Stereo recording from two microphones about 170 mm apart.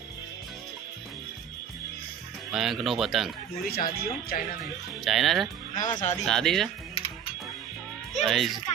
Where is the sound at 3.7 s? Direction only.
65° left (ahead or behind).